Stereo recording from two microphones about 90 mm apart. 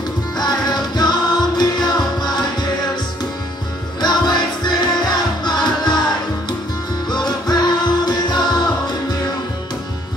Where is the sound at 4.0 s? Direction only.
55° left (ahead or behind).